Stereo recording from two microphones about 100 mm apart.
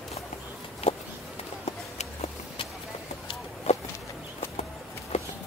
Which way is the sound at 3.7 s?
90° left.